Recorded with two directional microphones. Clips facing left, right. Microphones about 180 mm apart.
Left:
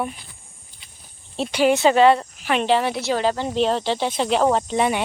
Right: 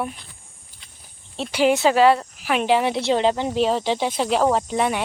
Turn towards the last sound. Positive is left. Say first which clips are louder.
# left 1 dB
turn(degrees=0)  # may be behind; listen again after turning